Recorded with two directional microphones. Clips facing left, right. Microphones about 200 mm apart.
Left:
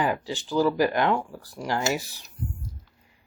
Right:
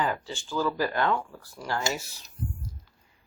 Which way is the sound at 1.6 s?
15° left (ahead or behind).